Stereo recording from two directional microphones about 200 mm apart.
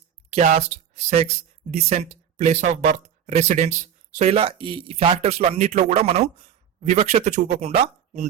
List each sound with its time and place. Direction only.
0.3 s speech: 35° right (ahead or behind)